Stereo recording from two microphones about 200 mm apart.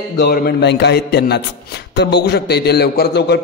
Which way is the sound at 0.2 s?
50° left (ahead or behind).